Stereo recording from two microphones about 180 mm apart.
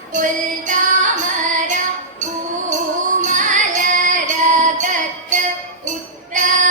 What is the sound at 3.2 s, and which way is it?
Music, 45° right (ahead or behind).